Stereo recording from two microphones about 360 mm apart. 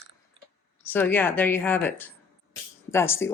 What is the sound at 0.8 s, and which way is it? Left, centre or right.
Speech, centre.